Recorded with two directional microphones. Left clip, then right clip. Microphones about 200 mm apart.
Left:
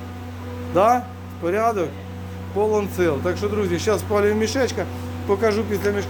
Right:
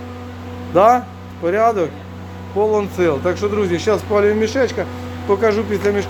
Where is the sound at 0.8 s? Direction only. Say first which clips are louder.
Right 5 dB; 15° right (ahead or behind).